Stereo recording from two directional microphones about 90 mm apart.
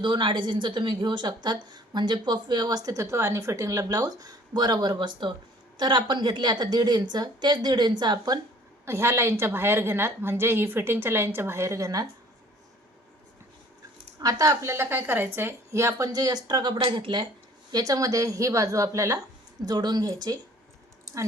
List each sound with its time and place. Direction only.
0.0 s a woman's voice: 60° right (ahead or behind)
8.8 s a woman's voice: 30° right (ahead or behind)
14.2 s a woman's voice: 45° right (ahead or behind); by 17.2 s 60° right (ahead or behind)
17.7 s a woman's voice: 45° right (ahead or behind)
19.6 s a woman's voice: 50° right (ahead or behind)